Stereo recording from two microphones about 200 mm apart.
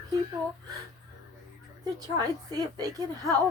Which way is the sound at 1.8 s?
20° right (ahead or behind).